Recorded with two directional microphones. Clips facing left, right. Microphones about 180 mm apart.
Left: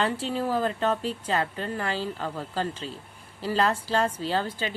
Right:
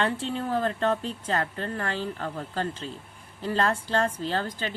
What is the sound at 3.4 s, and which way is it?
A woman's voice, 5° left (ahead or behind).